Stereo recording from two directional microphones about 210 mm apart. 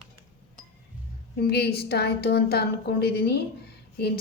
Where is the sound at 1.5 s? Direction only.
50° left (ahead or behind).